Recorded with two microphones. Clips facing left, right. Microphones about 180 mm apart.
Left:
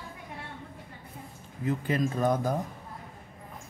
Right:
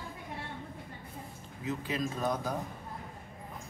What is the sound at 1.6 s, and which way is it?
Speech, 50° left (ahead or behind).